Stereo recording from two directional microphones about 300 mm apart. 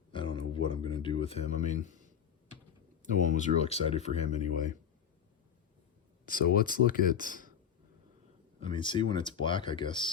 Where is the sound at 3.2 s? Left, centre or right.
Left.